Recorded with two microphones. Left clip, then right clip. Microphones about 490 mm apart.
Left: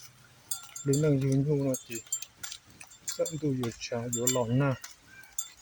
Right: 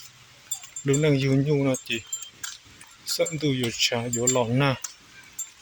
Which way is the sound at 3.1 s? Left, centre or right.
Left.